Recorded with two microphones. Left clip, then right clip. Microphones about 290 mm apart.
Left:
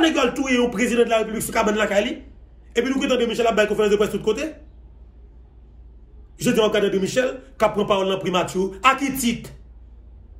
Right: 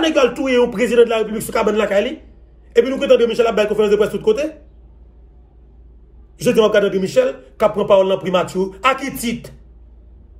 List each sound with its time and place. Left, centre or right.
0.0 s a man's voice: centre
6.3 s a man's voice: centre